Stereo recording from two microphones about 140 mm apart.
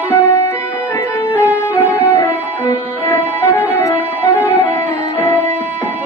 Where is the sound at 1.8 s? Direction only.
10° right (ahead or behind).